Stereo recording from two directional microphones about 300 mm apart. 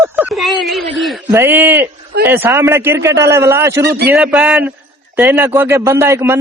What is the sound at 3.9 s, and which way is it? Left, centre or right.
Speech, right.